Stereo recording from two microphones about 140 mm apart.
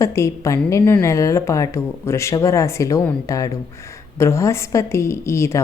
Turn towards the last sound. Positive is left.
turn(degrees=20)  # may be behind; listen again after turning